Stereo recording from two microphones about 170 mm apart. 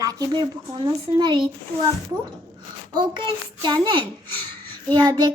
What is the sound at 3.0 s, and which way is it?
A child's voice, 25° right (ahead or behind).